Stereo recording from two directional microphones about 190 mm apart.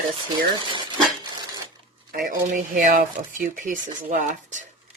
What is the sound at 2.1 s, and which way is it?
Speech, 50° right (ahead or behind).